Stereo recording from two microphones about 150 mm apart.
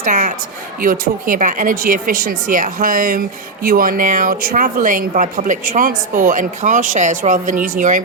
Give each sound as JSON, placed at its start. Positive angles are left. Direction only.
{"t": 0.0, "sound": "a woman's voice", "side_deg": -65}